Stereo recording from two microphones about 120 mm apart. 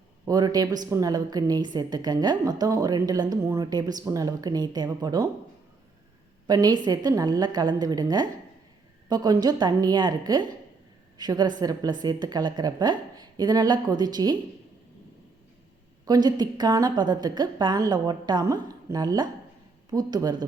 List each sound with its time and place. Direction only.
0.3 s a woman's voice: 35° right (ahead or behind)
6.5 s a woman's voice: 35° right (ahead or behind)
16.0 s a woman's voice: 35° right (ahead or behind)